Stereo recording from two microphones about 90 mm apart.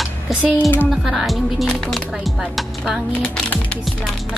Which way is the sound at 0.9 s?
Centre (ahead or behind).